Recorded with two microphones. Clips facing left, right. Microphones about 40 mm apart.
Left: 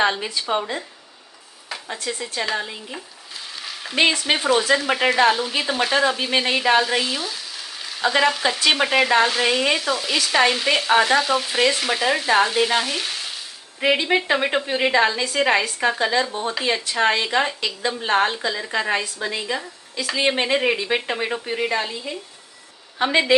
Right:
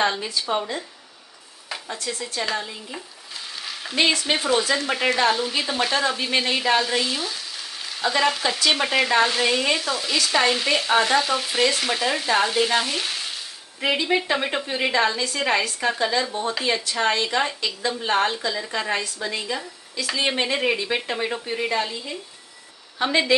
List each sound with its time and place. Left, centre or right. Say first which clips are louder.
0.0 s a woman's voice: left 2 dB; left
1.9 s a woman's voice: left 2 dB; centre
3.5 s frying: even; centre
4.3 s a woman's voice: left 3 dB; centre
13.7 s a woman's voice: left 3 dB; centre
20.5 s a woman's voice: left 2 dB; centre
20.9 s a woman's voice: left 2 dB; centre